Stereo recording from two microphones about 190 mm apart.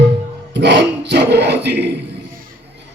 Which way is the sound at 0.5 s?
65° right (ahead or behind).